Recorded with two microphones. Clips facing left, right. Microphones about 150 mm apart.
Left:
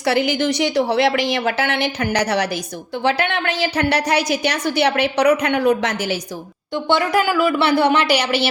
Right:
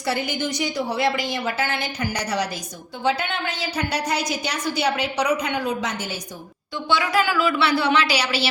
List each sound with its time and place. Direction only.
0.0 s a woman's voice: 80° left
6.8 s speech: 50° left (ahead or behind)